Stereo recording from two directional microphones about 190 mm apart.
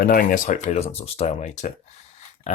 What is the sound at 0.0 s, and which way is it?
Speech, 50° left (ahead or behind).